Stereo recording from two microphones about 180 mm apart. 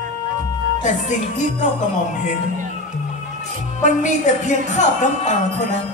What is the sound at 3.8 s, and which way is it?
A woman's voice, 40° left (ahead or behind).